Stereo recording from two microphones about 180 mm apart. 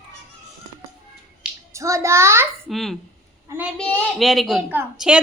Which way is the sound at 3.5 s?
10° right (ahead or behind).